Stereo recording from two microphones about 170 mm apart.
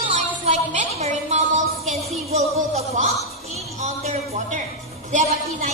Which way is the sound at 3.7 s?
45° right (ahead or behind).